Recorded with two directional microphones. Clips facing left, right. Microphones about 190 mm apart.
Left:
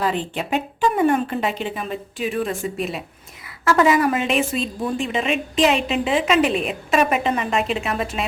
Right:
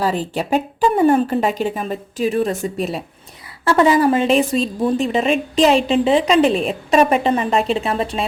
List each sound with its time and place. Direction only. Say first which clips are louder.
0.0 s a woman's voice: right 3 dB; 40° right (ahead or behind)